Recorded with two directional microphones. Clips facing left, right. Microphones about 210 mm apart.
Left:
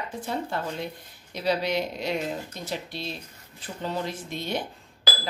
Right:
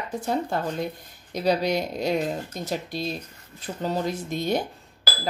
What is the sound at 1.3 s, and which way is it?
Speech, 45° right (ahead or behind).